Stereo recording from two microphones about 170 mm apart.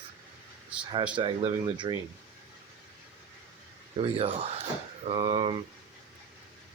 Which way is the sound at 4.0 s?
35° right (ahead or behind).